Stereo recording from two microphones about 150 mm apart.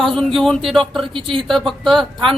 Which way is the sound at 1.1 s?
35° right (ahead or behind).